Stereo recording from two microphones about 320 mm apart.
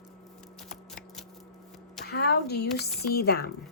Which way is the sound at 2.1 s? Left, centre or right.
Left.